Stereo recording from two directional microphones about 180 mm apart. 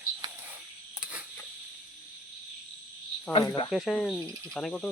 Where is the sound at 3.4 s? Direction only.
20° left (ahead or behind).